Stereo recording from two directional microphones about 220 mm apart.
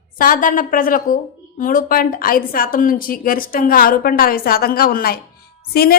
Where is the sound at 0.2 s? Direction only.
40° left (ahead or behind).